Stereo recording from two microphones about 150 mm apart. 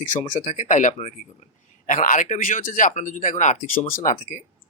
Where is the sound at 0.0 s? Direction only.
60° left (ahead or behind).